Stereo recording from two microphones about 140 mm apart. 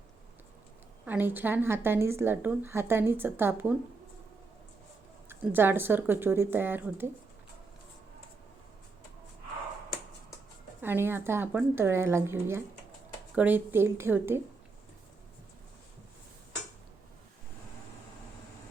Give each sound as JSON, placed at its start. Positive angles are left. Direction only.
{"t": 1.0, "sound": "a woman's voice", "side_deg": -15}
{"t": 5.3, "sound": "a woman's voice", "side_deg": -15}
{"t": 10.8, "sound": "a woman's voice", "side_deg": -15}